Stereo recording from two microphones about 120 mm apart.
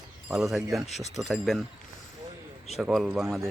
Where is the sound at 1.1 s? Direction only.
Centre (ahead or behind).